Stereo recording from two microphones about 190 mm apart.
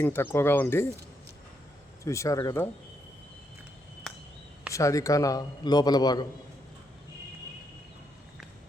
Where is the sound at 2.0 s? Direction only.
15° left (ahead or behind).